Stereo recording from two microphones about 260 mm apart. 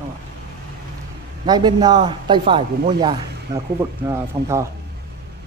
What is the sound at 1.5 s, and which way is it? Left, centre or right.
Speech, centre.